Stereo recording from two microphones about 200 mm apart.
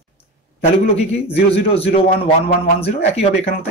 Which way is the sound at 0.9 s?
30° left (ahead or behind).